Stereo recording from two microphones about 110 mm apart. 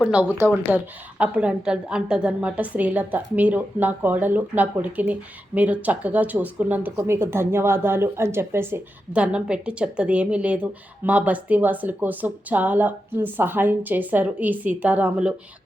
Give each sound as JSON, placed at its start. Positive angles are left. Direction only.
{"t": 0.0, "sound": "speech", "side_deg": -10}